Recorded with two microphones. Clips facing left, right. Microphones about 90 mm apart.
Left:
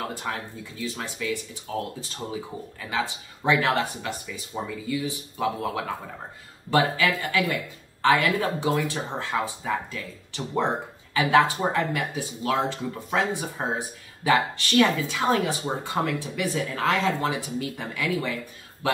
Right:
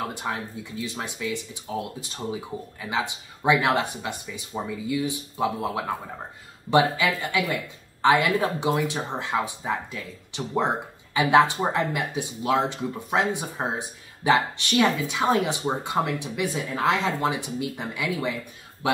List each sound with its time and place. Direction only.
0.1 s speech: 20° right (ahead or behind)
3.4 s speech: 15° right (ahead or behind)
6.7 s speech: 20° right (ahead or behind)